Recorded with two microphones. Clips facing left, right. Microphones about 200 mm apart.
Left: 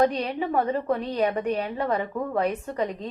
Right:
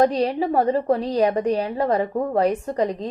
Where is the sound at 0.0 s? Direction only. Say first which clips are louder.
Right 4 dB; 35° right (ahead or behind).